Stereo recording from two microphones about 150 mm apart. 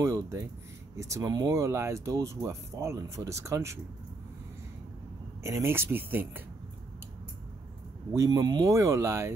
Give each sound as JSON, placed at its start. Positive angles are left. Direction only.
{"t": 0.0, "sound": "speech", "side_deg": -20}
{"t": 5.4, "sound": "speech", "side_deg": -15}
{"t": 8.1, "sound": "speech", "side_deg": -20}